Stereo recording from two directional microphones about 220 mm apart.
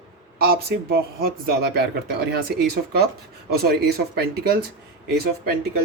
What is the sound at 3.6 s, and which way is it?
Speech, 45° right (ahead or behind).